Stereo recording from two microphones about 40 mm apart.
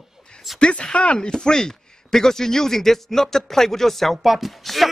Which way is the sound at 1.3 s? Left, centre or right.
Centre.